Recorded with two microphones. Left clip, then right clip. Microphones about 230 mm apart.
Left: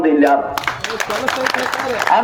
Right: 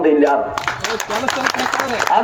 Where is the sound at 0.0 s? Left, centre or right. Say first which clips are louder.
Left 1 dB; left.